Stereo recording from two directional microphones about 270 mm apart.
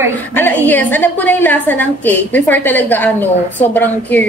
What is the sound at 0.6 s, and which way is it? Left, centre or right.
A woman's voice, centre.